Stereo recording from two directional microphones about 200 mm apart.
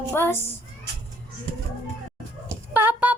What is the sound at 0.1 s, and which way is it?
Speech, 10° left (ahead or behind).